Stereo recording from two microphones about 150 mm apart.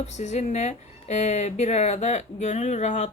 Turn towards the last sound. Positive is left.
turn(degrees=50)  # may be behind; listen again after turning